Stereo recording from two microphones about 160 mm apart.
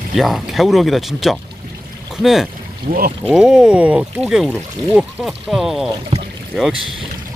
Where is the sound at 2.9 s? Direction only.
65° right (ahead or behind).